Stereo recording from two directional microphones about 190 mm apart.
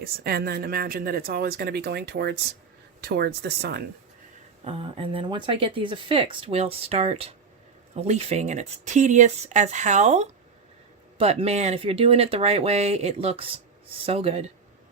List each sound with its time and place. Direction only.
0.0 s speech: 55° right (ahead or behind)
4.6 s speech: 30° right (ahead or behind)